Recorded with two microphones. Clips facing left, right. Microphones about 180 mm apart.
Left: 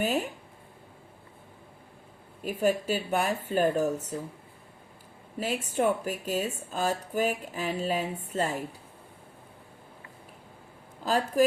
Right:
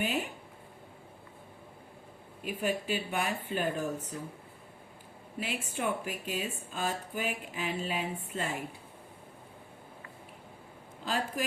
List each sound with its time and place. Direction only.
0.0 s speech: 40° left (ahead or behind)
2.4 s speech: 40° left (ahead or behind)
5.4 s speech: 40° left (ahead or behind)
11.0 s speech: 40° left (ahead or behind)